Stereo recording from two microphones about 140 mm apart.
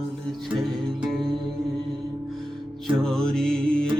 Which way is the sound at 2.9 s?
5° left (ahead or behind).